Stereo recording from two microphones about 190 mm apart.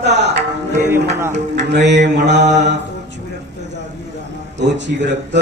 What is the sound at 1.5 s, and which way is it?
Speech, 65° right (ahead or behind).